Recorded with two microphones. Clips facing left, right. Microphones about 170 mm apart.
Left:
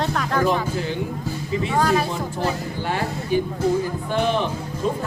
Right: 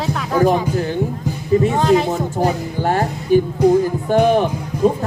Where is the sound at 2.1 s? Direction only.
45° right (ahead or behind).